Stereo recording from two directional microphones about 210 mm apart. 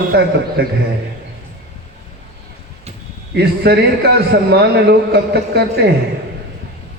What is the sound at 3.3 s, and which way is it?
A man's voice, 50° right (ahead or behind).